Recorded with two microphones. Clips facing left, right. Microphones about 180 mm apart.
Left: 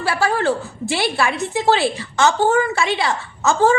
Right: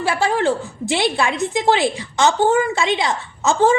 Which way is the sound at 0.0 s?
15° right (ahead or behind).